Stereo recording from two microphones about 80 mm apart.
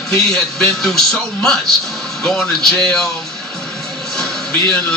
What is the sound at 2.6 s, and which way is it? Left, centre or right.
Speech, right.